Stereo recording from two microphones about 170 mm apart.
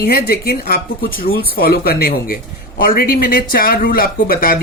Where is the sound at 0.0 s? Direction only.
65° left (ahead or behind).